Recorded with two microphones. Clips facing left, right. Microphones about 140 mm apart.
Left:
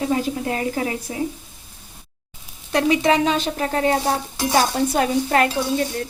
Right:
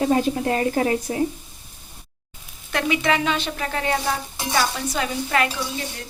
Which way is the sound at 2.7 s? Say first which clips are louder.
Left 4 dB; 35° left (ahead or behind).